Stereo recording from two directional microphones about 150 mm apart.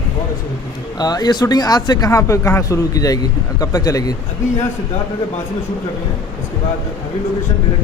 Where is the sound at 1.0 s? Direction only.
25° left (ahead or behind).